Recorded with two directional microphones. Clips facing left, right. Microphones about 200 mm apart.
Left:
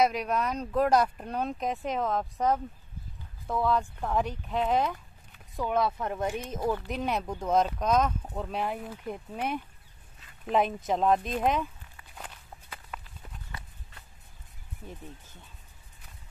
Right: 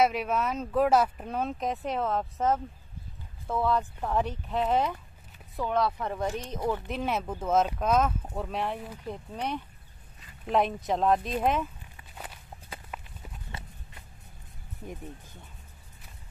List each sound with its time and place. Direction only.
0.0 s speech: 5° right (ahead or behind)
5.7 s speech: 10° left (ahead or behind)
13.5 s a sound: 25° right (ahead or behind)